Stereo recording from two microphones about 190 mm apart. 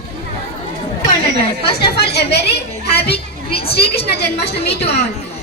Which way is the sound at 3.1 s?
30° left (ahead or behind).